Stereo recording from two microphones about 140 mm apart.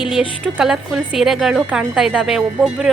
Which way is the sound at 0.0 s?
5° right (ahead or behind).